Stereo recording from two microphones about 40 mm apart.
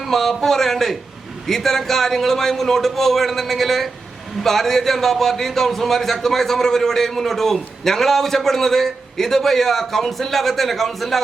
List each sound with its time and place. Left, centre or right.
0.1 s a man's voice: centre